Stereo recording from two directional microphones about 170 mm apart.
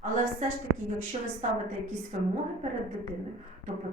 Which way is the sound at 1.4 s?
45° right (ahead or behind).